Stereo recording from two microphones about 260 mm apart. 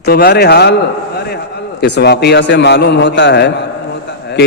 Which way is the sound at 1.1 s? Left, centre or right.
Left.